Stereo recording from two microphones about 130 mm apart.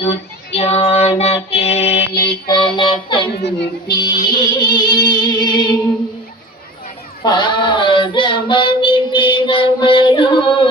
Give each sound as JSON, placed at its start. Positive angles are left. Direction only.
{"t": 0.5, "sound": "child singing", "side_deg": 50}
{"t": 2.1, "sound": "music", "side_deg": 35}
{"t": 7.2, "sound": "child singing", "side_deg": 35}